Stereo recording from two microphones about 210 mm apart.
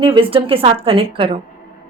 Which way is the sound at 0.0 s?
25° right (ahead or behind).